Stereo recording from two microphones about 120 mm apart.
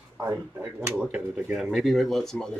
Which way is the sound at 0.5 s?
10° right (ahead or behind).